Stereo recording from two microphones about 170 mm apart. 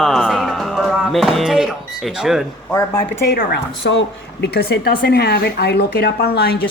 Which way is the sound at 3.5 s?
90° left.